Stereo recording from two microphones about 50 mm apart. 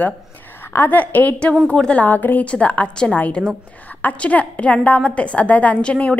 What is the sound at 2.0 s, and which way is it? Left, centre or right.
A woman's voice, left.